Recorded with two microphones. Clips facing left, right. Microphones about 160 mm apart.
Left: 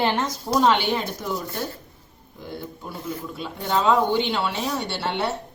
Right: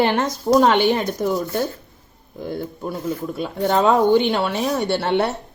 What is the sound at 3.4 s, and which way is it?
A woman's voice, 55° right (ahead or behind).